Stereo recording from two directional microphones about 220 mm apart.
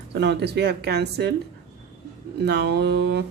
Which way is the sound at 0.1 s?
50° right (ahead or behind).